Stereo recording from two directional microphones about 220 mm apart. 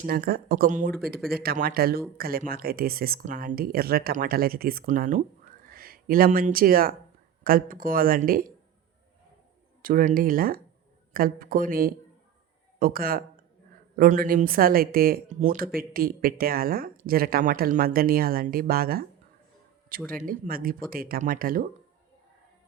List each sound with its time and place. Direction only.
0.0 s speech: 45° right (ahead or behind)
9.8 s speech: 40° right (ahead or behind)